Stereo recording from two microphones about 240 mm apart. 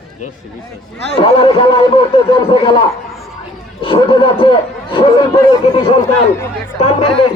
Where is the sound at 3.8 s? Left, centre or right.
Left.